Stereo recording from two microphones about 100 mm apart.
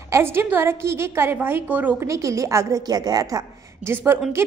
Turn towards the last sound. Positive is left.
turn(degrees=-20)  # may be behind; listen again after turning